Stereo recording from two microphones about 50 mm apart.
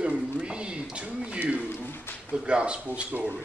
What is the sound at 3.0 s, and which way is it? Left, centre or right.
Speech, right.